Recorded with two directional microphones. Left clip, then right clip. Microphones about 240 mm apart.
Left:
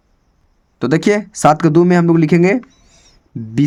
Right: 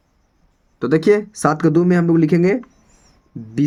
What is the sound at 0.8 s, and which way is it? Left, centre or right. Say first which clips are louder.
Speech: even; left.